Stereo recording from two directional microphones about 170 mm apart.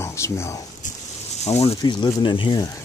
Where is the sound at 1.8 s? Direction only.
25° left (ahead or behind).